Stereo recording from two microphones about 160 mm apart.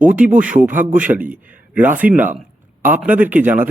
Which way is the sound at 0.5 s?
10° right (ahead or behind).